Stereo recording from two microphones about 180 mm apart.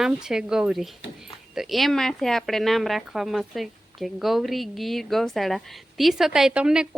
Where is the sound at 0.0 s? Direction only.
5° right (ahead or behind).